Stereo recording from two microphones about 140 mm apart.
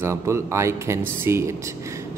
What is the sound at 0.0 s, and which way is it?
A man's voice, 20° right (ahead or behind).